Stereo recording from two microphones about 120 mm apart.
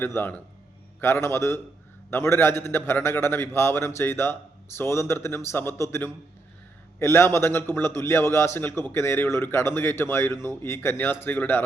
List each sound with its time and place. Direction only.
0.0 s a man's voice: 15° left (ahead or behind)